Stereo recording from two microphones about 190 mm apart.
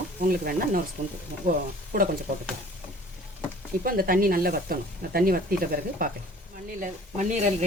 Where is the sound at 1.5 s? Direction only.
45° right (ahead or behind).